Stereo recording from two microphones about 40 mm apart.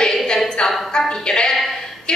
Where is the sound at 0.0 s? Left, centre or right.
Centre.